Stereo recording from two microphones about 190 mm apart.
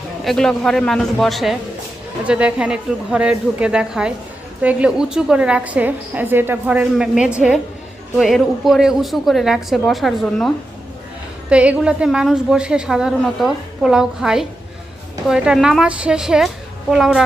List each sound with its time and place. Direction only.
0.3 s a woman's voice: centre (ahead or behind)